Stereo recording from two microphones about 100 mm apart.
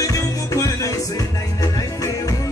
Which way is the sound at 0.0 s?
35° left (ahead or behind).